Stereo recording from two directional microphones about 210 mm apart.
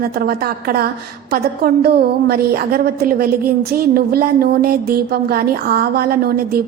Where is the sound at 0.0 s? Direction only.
45° right (ahead or behind).